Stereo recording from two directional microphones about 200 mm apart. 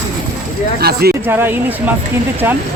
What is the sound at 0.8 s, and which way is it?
Speech, 50° right (ahead or behind).